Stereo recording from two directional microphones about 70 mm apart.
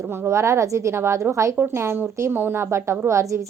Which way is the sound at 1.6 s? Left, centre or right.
Right.